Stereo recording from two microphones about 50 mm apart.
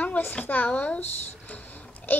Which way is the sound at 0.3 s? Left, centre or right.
Left.